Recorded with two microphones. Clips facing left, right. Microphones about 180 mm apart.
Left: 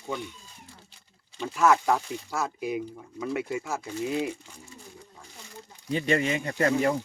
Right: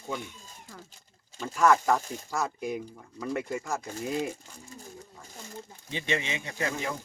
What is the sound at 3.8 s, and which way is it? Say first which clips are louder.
Speech: left 2 dB; 45° right (ahead or behind).